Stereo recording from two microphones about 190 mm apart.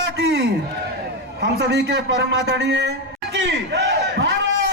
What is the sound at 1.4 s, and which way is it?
A man's voice, 60° right (ahead or behind).